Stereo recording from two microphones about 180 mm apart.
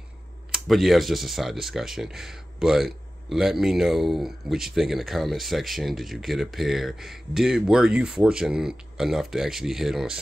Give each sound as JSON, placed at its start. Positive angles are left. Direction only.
{"t": 0.5, "sound": "speech", "side_deg": 0}